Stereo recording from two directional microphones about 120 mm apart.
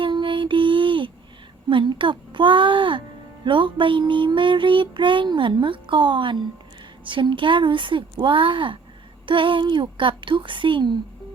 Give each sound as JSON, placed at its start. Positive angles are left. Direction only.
{"t": 0.0, "sound": "music", "side_deg": -45}